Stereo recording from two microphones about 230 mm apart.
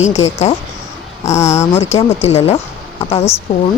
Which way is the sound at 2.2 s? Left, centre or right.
Left.